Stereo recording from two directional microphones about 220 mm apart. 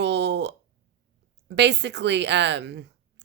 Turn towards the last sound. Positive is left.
turn(degrees=-50)  # may be behind; listen again after turning